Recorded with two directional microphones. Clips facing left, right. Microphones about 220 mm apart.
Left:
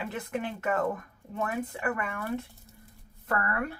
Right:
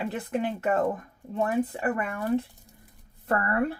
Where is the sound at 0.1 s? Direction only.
35° right (ahead or behind).